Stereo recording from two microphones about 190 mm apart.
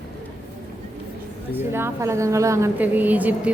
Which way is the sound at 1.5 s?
10° right (ahead or behind).